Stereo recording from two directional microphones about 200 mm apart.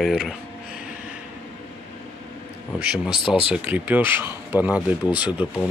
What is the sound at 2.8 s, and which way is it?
Speech, 5° right (ahead or behind).